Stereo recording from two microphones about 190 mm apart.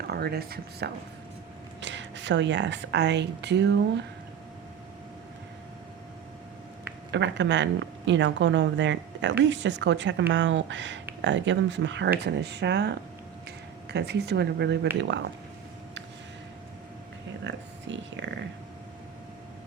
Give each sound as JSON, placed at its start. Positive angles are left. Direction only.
{"t": 0.1, "sound": "speech", "side_deg": -55}
{"t": 1.8, "sound": "speech", "side_deg": -70}
{"t": 7.1, "sound": "speech", "side_deg": -70}
{"t": 17.4, "sound": "speech", "side_deg": -70}